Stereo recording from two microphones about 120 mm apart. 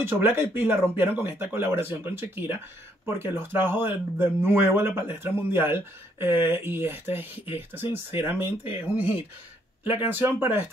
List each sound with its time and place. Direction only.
0.0 s speech: 20° right (ahead or behind)